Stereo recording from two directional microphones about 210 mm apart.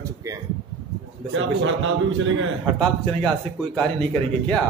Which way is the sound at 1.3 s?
65° right (ahead or behind).